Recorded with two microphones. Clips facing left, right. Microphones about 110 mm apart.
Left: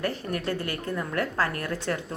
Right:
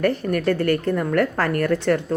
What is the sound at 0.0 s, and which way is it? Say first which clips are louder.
Speech: right 9 dB; 60° right (ahead or behind).